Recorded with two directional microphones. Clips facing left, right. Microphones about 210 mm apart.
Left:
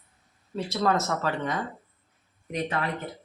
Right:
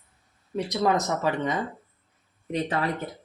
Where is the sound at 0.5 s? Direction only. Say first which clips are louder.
Right 2 dB; 15° right (ahead or behind).